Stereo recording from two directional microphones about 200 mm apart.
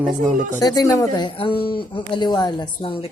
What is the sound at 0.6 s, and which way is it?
Speech, 20° left (ahead or behind).